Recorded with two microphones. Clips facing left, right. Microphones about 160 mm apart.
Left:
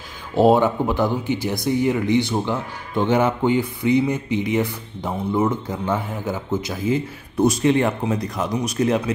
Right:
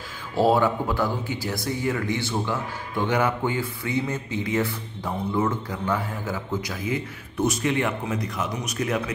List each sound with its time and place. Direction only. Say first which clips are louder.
0.4 s speech: left 5 dB; 20° left (ahead or behind)